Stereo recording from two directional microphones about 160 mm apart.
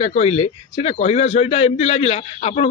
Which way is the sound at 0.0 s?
40° left (ahead or behind).